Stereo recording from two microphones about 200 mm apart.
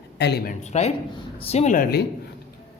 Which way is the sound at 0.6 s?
35° left (ahead or behind).